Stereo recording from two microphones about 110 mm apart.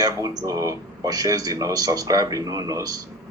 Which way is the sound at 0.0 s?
30° right (ahead or behind).